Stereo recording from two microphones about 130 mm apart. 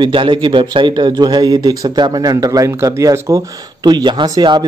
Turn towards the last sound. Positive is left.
turn(degrees=-35)  # may be behind; listen again after turning